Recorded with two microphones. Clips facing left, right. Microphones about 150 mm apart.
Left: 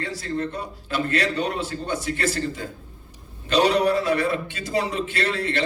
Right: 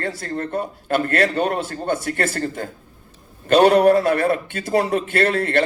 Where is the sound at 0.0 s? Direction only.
55° right (ahead or behind).